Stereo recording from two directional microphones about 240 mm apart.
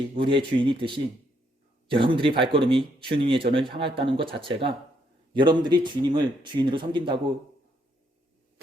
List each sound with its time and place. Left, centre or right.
0.3 s speech: right